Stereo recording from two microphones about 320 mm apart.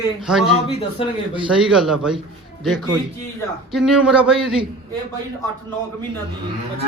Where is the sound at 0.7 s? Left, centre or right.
Centre.